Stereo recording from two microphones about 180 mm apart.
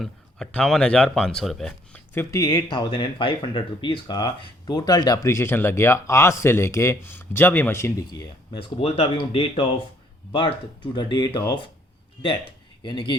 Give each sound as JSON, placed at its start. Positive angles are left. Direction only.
{"t": 0.0, "sound": "speech", "side_deg": 5}
{"t": 2.1, "sound": "speech", "side_deg": 15}
{"t": 12.8, "sound": "speech", "side_deg": 25}